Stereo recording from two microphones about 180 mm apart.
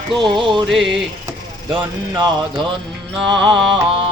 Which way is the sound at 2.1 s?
25° right (ahead or behind).